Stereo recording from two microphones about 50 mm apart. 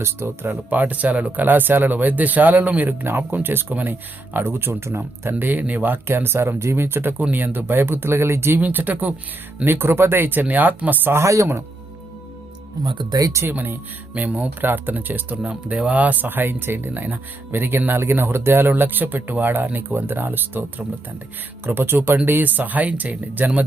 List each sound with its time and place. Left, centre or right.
0.0 s speech: right
0.7 s speech: right
5.5 s speech: right
7.2 s speech: right
8.5 s speech: right
9.6 s speech: right
11.1 s speech: right
13.4 s speech: right
14.3 s speech: right
14.6 s speech: right
18.7 s speech: right
22.3 s speech: right